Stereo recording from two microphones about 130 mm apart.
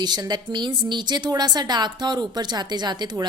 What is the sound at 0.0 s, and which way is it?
A woman's voice, 30° right (ahead or behind).